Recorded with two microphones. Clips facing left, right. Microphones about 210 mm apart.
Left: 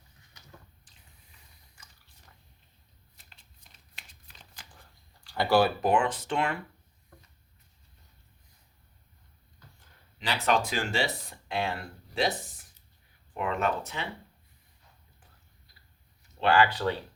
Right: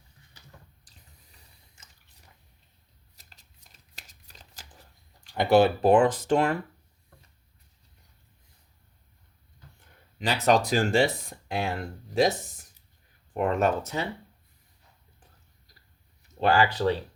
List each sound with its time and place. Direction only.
0.9 s sink: 40° right (ahead or behind)
3.2 s shuffling cards: 40° right (ahead or behind)
3.9 s a sound: 40° right (ahead or behind)
5.2 s speech: 20° right (ahead or behind)
5.9 s speech: 40° right (ahead or behind)
10.2 s speech: 45° right (ahead or behind)
13.3 s speech: 45° right (ahead or behind)
16.4 s speech: 40° right (ahead or behind)